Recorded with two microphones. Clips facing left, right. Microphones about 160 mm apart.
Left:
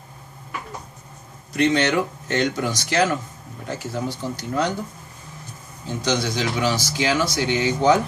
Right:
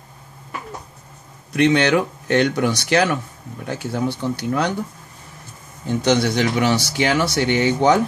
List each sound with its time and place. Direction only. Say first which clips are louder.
1.5 s a man's voice: right 3 dB; 65° right (ahead or behind)
6.0 s a man's voice: right 5 dB; 60° right (ahead or behind)